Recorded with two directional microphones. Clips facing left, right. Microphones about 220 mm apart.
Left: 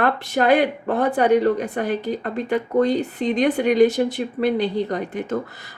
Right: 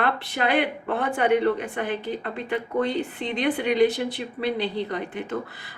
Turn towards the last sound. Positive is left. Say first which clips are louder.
# left 5 dB
turn(degrees=40)  # may be behind; listen again after turning